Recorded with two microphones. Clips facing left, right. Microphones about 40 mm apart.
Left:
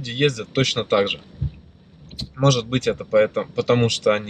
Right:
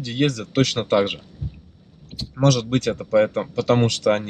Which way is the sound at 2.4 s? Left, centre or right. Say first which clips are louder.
Even; centre.